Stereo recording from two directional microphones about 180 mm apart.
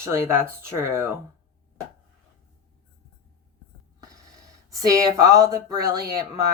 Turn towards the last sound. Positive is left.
turn(degrees=-20)  # may be behind; listen again after turning